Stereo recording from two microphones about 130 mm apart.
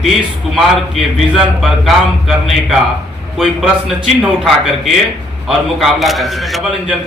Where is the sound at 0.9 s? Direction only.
Centre (ahead or behind).